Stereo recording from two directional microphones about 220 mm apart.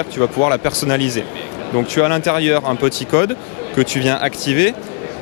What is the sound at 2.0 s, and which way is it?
Speech, 15° left (ahead or behind).